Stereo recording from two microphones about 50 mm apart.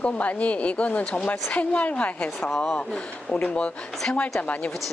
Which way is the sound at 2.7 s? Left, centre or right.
Centre.